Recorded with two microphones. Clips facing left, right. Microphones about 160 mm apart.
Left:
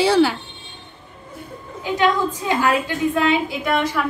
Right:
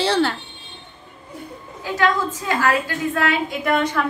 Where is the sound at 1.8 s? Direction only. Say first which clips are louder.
Left 2 dB; 15° left (ahead or behind).